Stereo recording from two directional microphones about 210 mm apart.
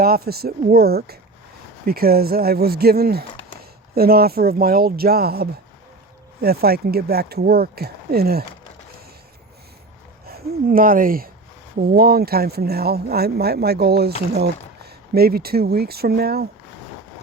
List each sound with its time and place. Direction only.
0.0 s speech: 45° right (ahead or behind)
10.2 s speech: 45° right (ahead or behind)